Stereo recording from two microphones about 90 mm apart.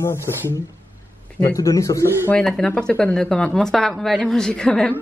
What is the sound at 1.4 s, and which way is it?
Speech, 35° left (ahead or behind).